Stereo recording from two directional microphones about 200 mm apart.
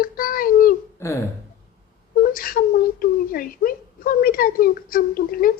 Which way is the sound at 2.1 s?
45° left (ahead or behind).